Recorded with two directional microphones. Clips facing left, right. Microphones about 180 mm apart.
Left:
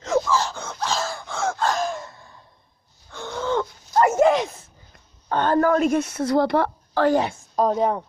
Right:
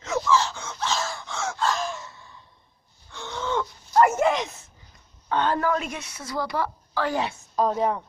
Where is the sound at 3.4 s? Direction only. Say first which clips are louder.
Left 4 dB; 40° left (ahead or behind).